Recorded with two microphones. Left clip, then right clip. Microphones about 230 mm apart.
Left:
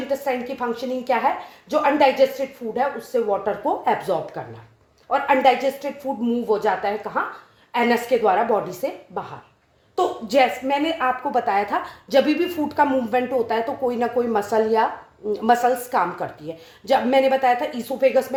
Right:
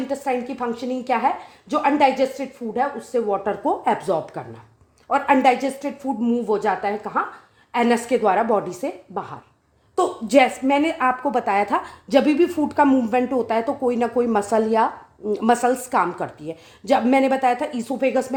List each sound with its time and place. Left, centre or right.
0.1 s a woman's voice: right